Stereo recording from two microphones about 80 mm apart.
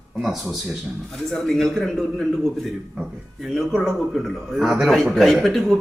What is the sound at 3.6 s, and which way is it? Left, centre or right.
A man's voice, centre.